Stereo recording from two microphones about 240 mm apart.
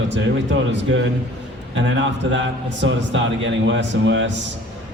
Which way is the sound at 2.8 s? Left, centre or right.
Right.